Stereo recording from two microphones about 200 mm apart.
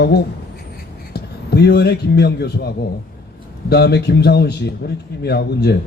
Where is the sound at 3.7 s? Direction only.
55° left (ahead or behind).